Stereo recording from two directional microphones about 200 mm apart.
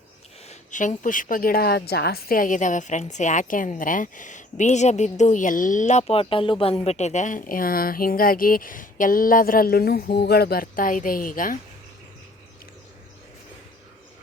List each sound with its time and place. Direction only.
0.4 s a woman's voice: 40° left (ahead or behind)